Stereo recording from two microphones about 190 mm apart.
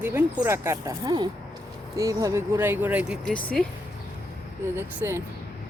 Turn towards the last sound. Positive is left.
turn(degrees=-15)  # may be behind; listen again after turning